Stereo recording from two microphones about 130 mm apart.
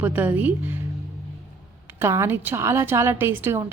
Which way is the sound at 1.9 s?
20° right (ahead or behind).